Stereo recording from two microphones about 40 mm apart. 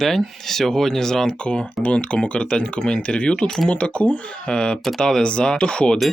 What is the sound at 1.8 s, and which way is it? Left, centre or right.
Speech, left.